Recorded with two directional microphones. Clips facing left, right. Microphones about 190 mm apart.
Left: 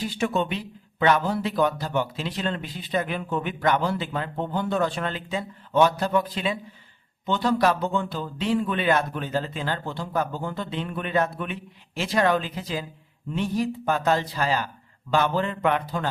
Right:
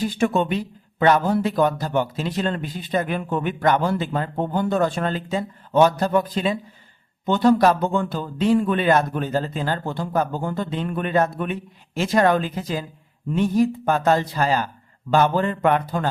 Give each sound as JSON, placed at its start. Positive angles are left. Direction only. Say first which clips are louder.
{"t": 0.0, "sound": "speech", "louder": "right 5 dB", "side_deg": -45}